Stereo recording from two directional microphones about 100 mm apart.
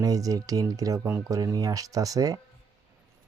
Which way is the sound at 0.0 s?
35° right (ahead or behind).